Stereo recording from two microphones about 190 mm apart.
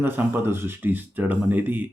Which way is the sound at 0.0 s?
10° right (ahead or behind).